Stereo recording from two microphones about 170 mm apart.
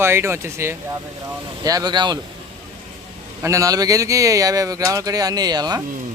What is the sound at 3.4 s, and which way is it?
Speech, 20° right (ahead or behind).